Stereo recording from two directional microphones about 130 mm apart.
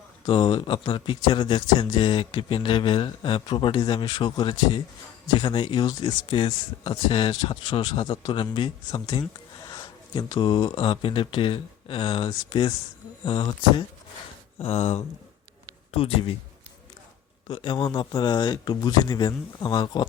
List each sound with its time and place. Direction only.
0.3 s speech: 40° left (ahead or behind)
14.6 s speech: 55° left (ahead or behind)
17.5 s speech: 40° left (ahead or behind)